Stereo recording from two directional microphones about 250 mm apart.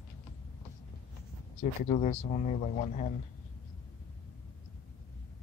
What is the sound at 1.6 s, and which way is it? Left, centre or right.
A man's voice, left.